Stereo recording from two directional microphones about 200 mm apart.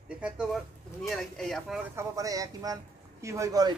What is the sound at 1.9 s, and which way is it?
Speech, 15° right (ahead or behind).